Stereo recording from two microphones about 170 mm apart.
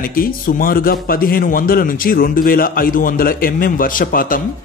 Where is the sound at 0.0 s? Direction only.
55° left (ahead or behind).